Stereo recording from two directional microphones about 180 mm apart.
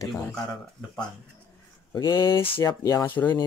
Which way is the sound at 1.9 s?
15° left (ahead or behind).